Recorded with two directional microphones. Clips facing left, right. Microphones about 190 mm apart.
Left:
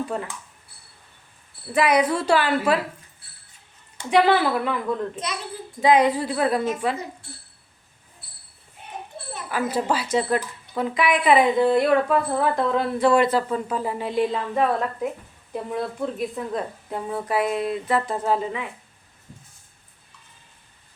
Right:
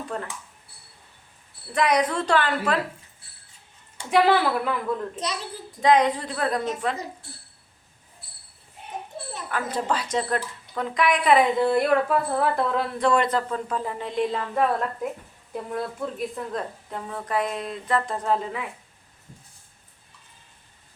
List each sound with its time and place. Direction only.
0.1 s a woman's voice: 10° left (ahead or behind)
1.7 s a woman's voice: 5° left (ahead or behind)
4.1 s a woman's voice: centre (ahead or behind)
5.8 s a woman's voice: 5° left (ahead or behind)
9.5 s a woman's voice: 5° left (ahead or behind)